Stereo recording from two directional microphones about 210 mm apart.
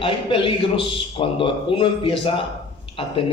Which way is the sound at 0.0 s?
25° left (ahead or behind).